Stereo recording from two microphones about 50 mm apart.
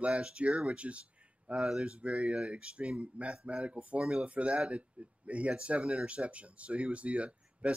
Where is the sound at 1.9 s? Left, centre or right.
Right.